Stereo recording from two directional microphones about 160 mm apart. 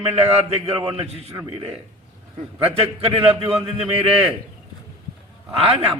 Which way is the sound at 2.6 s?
35° right (ahead or behind).